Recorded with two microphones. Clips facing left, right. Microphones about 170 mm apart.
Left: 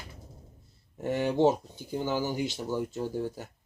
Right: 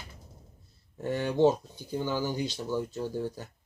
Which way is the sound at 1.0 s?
20° left (ahead or behind).